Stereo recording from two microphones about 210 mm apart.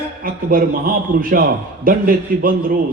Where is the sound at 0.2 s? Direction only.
45° right (ahead or behind).